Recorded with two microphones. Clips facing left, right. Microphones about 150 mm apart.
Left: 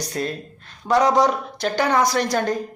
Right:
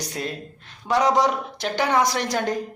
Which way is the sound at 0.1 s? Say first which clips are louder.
Left 4 dB; 45° left (ahead or behind).